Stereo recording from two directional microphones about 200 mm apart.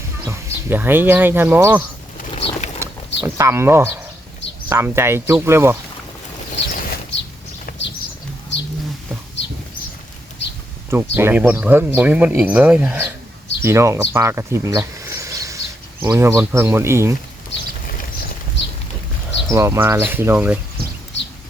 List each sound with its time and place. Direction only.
0.3 s speech: 15° right (ahead or behind)
2.3 s a sound: 35° left (ahead or behind)
3.2 s speech: 15° right (ahead or behind)
6.6 s a sound: 50° left (ahead or behind)
7.7 s bird: 45° left (ahead or behind)
10.8 s speech: 10° right (ahead or behind)
19.5 s speech: 15° right (ahead or behind)